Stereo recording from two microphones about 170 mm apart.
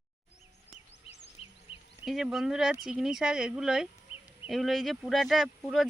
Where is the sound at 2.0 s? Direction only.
Centre (ahead or behind).